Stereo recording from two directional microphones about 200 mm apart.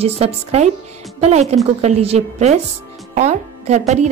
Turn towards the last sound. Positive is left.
turn(degrees=-35)  # may be behind; listen again after turning